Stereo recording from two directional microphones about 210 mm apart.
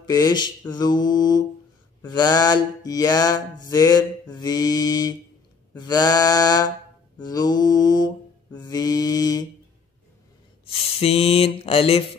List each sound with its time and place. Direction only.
0.0 s mantra: 20° left (ahead or behind)
10.6 s mantra: 25° left (ahead or behind)